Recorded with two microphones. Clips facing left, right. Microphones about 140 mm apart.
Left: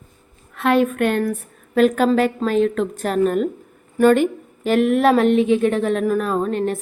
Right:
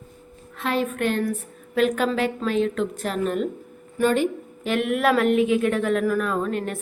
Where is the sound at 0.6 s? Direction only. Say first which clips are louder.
Left 7 dB; 60° left (ahead or behind).